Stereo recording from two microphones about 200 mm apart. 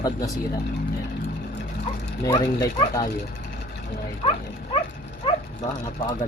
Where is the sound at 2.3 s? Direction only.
20° left (ahead or behind).